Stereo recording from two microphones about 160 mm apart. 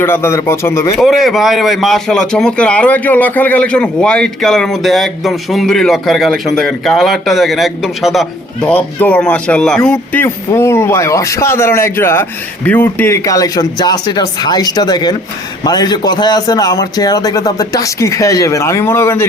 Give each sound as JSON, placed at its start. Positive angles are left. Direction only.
{"t": 0.0, "sound": "a man's voice", "side_deg": 15}
{"t": 0.9, "sound": "a man's voice", "side_deg": 0}